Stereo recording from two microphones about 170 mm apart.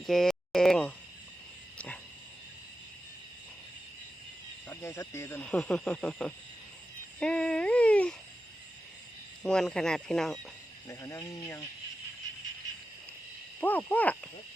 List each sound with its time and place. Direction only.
0.0 s speech: centre (ahead or behind)
4.7 s speech: 15° left (ahead or behind)
7.2 s a sound: 5° left (ahead or behind)
9.4 s speech: 5° left (ahead or behind)
10.8 s speech: 20° left (ahead or behind)
13.6 s speech: 10° left (ahead or behind)